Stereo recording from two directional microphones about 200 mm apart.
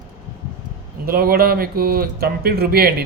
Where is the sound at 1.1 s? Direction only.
50° right (ahead or behind).